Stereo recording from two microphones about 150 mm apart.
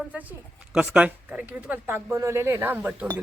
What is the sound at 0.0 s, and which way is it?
A woman's voice, 10° right (ahead or behind).